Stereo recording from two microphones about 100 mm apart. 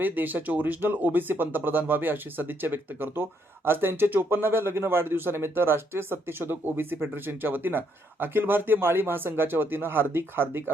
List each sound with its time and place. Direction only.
0.0 s speech: 20° right (ahead or behind)